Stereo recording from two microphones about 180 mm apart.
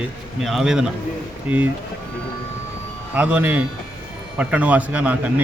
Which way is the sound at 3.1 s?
10° right (ahead or behind).